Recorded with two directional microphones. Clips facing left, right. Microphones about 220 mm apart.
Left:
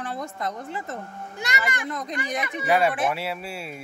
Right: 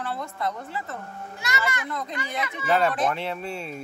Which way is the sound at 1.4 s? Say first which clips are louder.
Even; 15° left (ahead or behind).